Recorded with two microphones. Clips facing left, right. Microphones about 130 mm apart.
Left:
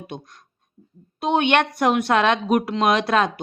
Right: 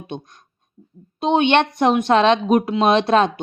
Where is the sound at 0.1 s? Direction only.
20° right (ahead or behind).